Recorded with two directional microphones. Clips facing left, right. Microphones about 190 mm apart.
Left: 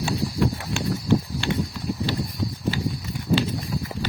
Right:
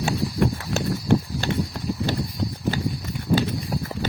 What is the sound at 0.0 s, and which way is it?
Clip-clop, 40° right (ahead or behind).